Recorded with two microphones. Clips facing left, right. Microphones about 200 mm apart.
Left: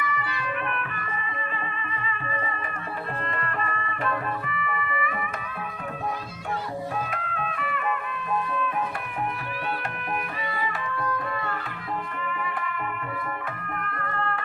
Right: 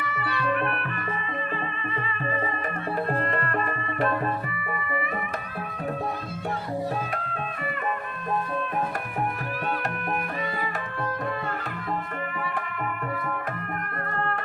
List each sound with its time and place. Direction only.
0.0 s music: 35° right (ahead or behind)
2.2 s music: 45° right (ahead or behind)
7.1 s music: 35° right (ahead or behind)
10.6 s tabla: 50° right (ahead or behind)
12.2 s music: 45° right (ahead or behind)